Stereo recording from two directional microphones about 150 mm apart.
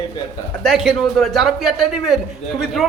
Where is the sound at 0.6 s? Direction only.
Centre (ahead or behind).